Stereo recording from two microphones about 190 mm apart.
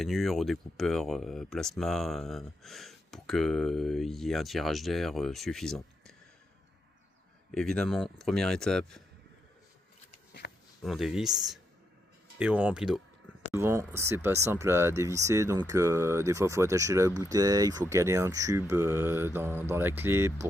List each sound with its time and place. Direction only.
0.0 s speech: centre (ahead or behind)
7.5 s speech: 5° left (ahead or behind)
10.8 s speech: centre (ahead or behind)